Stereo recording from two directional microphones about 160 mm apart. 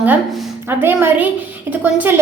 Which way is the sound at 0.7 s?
15° right (ahead or behind).